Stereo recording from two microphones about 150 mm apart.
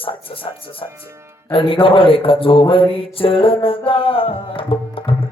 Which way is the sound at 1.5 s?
35° left (ahead or behind).